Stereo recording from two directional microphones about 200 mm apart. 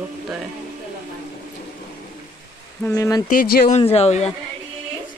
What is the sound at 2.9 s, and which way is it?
Speech, 15° left (ahead or behind).